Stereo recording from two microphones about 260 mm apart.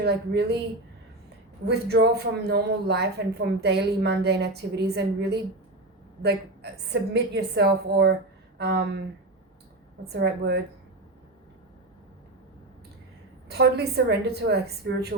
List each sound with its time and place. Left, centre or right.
0.0 s speech: right
1.6 s speech: right
10.1 s speech: right
13.5 s speech: right